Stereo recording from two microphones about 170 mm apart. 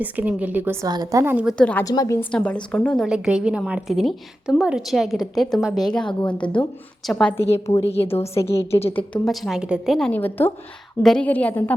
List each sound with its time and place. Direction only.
0.0 s speech: 10° right (ahead or behind)
1.5 s a woman's voice: 5° left (ahead or behind)
1.8 s a woman's voice: 20° left (ahead or behind)
2.3 s a woman's voice: 5° left (ahead or behind)
8.0 s a woman's voice: 35° left (ahead or behind)
8.4 s a woman's voice: 15° left (ahead or behind); by 10.1 s centre (ahead or behind)
10.1 s a woman's voice: 10° left (ahead or behind)